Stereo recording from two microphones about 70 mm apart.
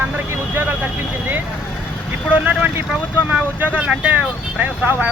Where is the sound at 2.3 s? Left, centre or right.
Right.